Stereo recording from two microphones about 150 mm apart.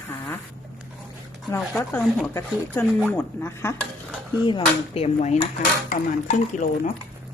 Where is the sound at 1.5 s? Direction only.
10° left (ahead or behind).